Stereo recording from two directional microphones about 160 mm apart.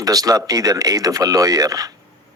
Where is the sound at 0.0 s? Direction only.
20° right (ahead or behind).